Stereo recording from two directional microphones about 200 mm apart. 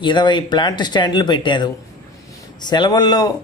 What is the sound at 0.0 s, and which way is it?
A man's voice, 25° left (ahead or behind).